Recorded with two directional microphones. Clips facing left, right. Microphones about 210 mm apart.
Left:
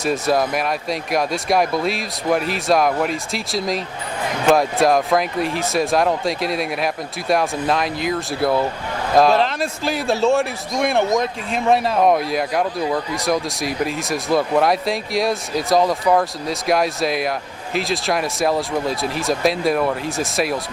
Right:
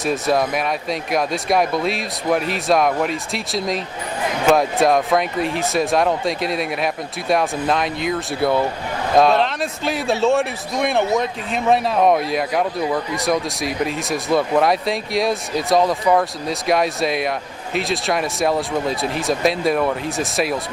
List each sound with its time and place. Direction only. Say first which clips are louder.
0.0 s a man's voice: even; centre (ahead or behind)